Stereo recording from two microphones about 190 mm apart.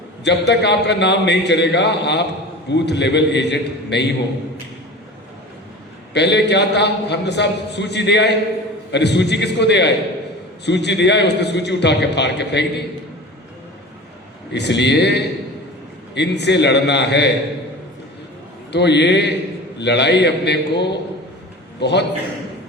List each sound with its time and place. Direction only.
0.3 s a man's voice: 65° left (ahead or behind)
6.1 s a man's voice: 65° left (ahead or behind)
14.5 s a man's voice: 65° left (ahead or behind)
18.7 s a man's voice: 65° left (ahead or behind)